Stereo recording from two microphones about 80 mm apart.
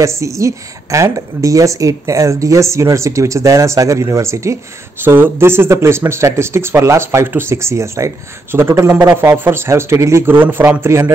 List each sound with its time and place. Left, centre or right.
0.0 s speech: right
5.0 s speech: right